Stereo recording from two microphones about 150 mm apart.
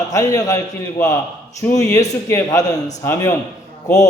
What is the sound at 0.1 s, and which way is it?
A man's voice, 25° left (ahead or behind).